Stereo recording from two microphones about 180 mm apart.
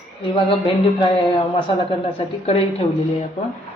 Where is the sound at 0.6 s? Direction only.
30° left (ahead or behind).